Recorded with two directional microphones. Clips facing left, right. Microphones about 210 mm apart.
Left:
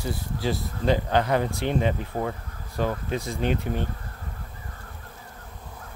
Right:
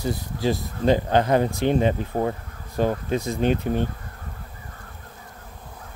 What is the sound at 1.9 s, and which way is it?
Speech, 35° right (ahead or behind).